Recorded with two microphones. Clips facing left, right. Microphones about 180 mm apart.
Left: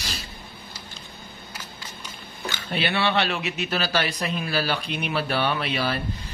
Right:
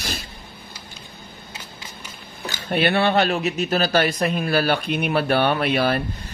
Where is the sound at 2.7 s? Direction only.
50° right (ahead or behind).